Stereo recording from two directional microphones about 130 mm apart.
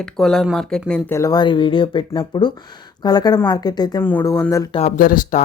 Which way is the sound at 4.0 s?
15° left (ahead or behind).